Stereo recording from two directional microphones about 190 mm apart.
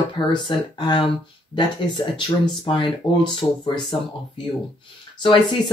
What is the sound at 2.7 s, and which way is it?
Speech, 25° left (ahead or behind).